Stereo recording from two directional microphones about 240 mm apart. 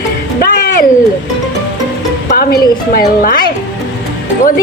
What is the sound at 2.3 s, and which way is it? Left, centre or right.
A woman's voice, left.